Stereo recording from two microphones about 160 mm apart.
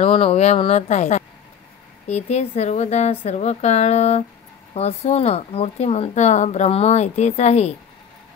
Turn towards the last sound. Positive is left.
turn(degrees=45)  # may be behind; listen again after turning